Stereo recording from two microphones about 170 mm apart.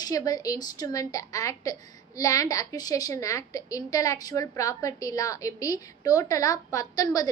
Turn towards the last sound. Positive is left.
turn(degrees=20)  # may be behind; listen again after turning